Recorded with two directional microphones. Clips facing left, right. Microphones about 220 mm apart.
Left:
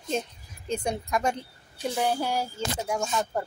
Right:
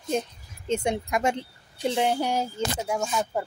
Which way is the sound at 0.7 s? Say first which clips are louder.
Right 3 dB; 25° right (ahead or behind).